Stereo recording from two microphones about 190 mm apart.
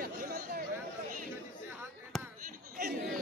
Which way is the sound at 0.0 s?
50° right (ahead or behind).